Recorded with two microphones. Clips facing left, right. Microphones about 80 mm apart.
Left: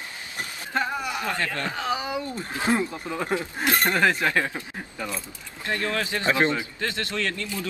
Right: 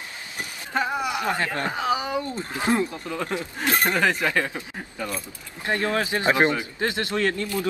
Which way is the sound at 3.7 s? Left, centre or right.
Centre.